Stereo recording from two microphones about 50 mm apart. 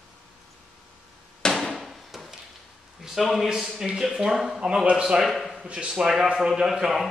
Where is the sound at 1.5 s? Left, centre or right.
Centre.